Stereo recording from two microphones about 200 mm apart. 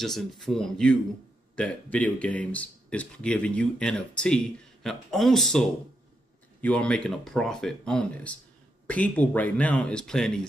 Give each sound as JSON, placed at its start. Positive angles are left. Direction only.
{"t": 0.0, "sound": "speech", "side_deg": 0}